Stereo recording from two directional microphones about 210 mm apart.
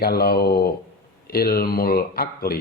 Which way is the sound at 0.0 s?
45° left (ahead or behind).